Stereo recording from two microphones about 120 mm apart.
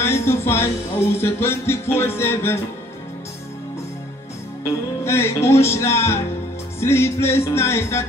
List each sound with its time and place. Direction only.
0.0 s speech: 20° left (ahead or behind)
5.0 s speech: 20° left (ahead or behind)